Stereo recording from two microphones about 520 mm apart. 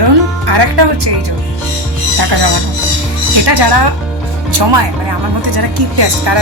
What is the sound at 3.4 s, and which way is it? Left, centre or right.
Speech, right.